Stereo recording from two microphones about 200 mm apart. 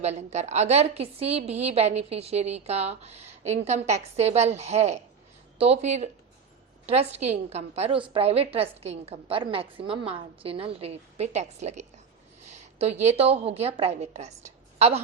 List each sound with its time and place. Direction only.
0.0 s a woman's voice: 35° right (ahead or behind)